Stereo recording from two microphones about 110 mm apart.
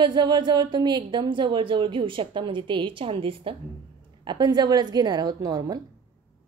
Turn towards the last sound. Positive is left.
turn(degrees=-35)  # may be behind; listen again after turning